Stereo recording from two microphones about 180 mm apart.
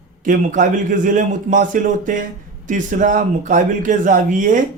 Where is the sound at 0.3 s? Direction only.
45° right (ahead or behind).